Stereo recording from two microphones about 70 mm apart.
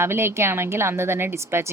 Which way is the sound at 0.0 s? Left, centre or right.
Right.